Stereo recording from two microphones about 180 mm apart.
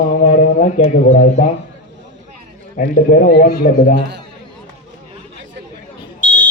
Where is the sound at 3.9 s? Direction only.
70° right (ahead or behind).